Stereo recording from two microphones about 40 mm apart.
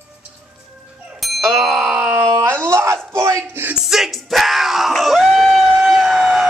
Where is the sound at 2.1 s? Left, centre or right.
Right.